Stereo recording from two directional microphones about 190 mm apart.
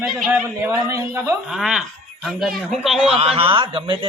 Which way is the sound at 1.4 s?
5° right (ahead or behind).